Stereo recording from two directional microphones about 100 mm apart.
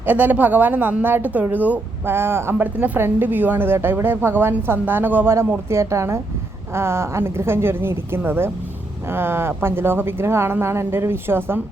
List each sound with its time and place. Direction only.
0.0 s a woman's voice: 15° right (ahead or behind)